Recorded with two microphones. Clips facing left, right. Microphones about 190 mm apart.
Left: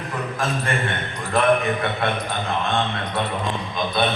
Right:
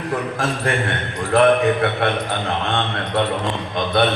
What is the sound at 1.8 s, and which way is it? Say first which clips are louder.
Speech: right 4 dB; 65° right (ahead or behind).